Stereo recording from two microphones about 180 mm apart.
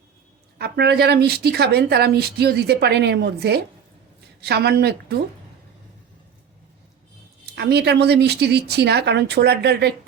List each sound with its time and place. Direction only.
0.6 s a woman's voice: 65° right (ahead or behind)
7.5 s a woman's voice: 65° right (ahead or behind)